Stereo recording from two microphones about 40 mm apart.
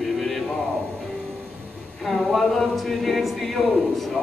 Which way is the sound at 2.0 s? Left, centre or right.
Centre.